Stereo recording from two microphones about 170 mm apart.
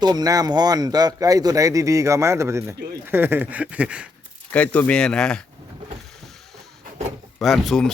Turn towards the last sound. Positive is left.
turn(degrees=0)  # may be behind; listen again after turning